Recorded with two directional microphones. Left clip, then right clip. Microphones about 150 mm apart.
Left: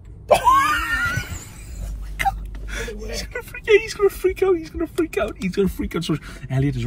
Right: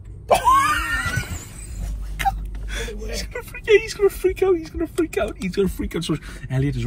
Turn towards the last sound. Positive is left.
turn(degrees=15)  # may be behind; listen again after turning